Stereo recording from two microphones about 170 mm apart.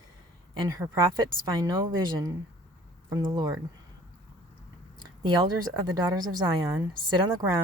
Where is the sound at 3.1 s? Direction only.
25° right (ahead or behind).